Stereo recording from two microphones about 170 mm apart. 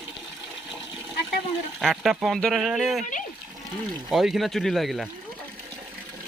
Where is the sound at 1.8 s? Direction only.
Centre (ahead or behind).